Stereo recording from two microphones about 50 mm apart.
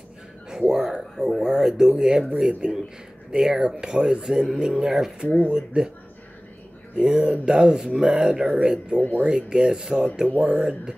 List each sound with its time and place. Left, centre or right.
0.5 s a sound: centre
1.4 s speech: centre
7.0 s speech: centre
8.9 s speech: left
9.2 s speech: centre
10.4 s speech: right